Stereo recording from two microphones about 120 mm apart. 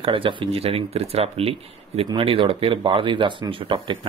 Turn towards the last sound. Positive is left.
turn(degrees=-45)  # may be behind; listen again after turning